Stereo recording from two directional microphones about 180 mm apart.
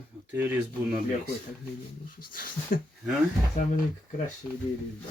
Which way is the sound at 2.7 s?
50° left (ahead or behind).